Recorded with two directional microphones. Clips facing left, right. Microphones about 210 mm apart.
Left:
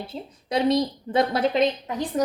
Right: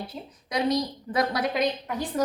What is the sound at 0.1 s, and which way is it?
A woman's voice, 30° left (ahead or behind).